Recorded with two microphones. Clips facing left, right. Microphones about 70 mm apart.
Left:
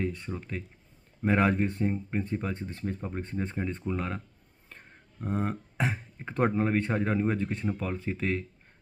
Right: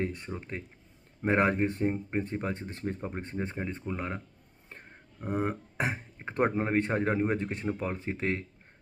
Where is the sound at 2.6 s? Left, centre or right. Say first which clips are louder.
Left 2 dB; right.